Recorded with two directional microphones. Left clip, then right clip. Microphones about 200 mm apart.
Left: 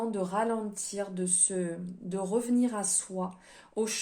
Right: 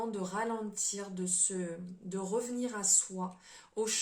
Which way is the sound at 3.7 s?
35° left (ahead or behind).